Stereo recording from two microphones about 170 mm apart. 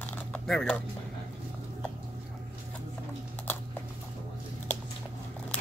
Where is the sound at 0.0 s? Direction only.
5° left (ahead or behind).